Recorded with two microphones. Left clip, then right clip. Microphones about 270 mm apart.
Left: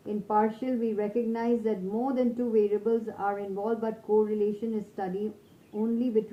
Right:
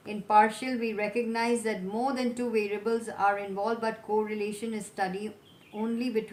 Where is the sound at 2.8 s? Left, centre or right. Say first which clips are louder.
Right 1 dB; right.